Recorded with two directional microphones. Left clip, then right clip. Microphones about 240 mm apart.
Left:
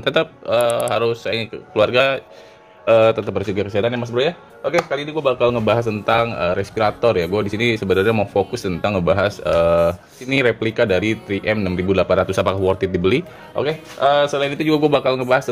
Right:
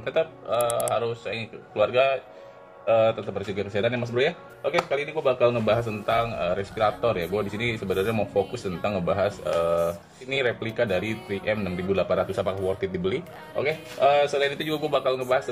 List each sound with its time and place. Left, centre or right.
0.0 s speech: left